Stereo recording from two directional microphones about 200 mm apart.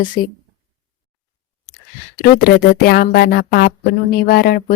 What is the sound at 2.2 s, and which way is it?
Speech, 50° left (ahead or behind).